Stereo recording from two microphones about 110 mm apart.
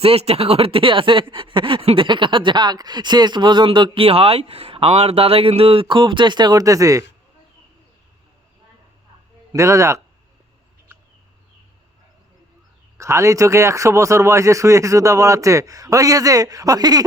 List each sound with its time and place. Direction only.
0.0 s speech: 65° right (ahead or behind); by 7.0 s 30° right (ahead or behind)
9.5 s speech: 30° right (ahead or behind)
13.0 s speech: 25° right (ahead or behind)